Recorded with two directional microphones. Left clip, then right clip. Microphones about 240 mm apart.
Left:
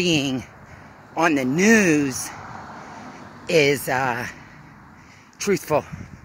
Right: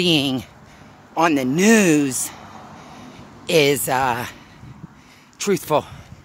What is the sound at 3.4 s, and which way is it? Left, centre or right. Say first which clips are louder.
Speech: right 2 dB; right.